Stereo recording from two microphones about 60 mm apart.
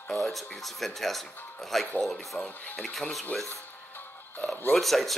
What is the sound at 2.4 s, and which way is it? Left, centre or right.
Speech, left.